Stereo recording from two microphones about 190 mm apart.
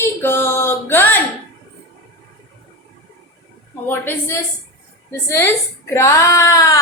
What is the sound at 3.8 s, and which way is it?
Speech, 10° left (ahead or behind).